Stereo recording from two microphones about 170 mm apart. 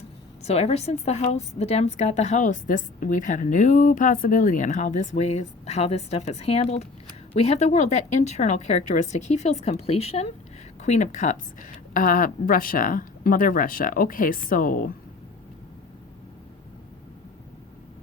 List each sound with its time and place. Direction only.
0.4 s a woman's voice: 40° left (ahead or behind); by 14.9 s 55° left (ahead or behind)